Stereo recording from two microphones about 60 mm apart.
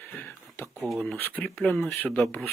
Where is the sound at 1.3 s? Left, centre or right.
Left.